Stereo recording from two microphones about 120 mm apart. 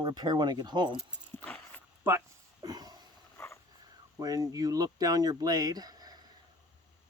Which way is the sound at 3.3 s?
20° left (ahead or behind).